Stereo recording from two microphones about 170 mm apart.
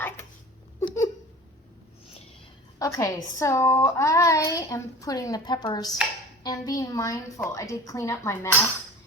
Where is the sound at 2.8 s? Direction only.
20° left (ahead or behind).